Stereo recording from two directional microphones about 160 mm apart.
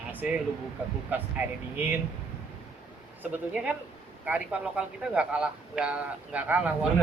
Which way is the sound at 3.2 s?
10° right (ahead or behind).